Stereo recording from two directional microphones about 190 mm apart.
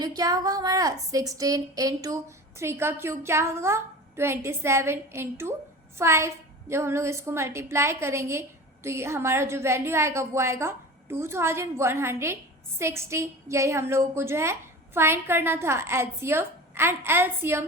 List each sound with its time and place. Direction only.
0.0 s a woman's voice: 20° right (ahead or behind)